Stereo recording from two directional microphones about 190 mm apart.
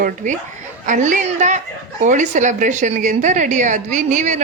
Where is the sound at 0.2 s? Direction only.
40° right (ahead or behind).